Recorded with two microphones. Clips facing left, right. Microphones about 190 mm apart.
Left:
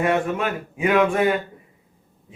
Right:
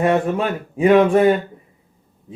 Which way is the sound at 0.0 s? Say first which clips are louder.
Right 4 dB; 35° right (ahead or behind).